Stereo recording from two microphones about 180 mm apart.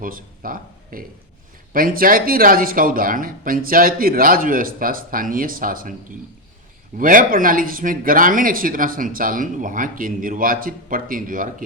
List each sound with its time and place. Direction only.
0.0 s a man's voice: 50° right (ahead or behind)